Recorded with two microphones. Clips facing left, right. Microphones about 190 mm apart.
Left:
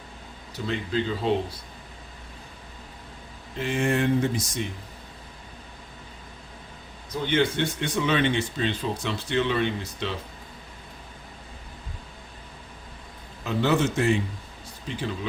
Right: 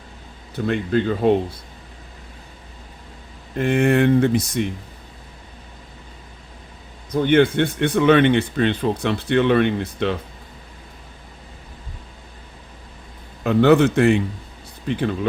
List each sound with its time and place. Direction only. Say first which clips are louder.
0.5 s speech: right 7 dB; 55° right (ahead or behind)
3.5 s speech: right 8 dB; 55° right (ahead or behind)
7.1 s speech: right 8 dB; 55° right (ahead or behind)
13.4 s speech: right 9 dB; 60° right (ahead or behind)